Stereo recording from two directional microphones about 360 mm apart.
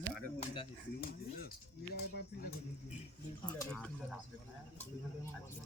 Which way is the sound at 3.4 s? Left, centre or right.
Centre.